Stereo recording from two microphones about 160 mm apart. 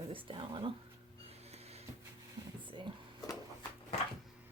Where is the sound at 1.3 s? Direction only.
40° right (ahead or behind).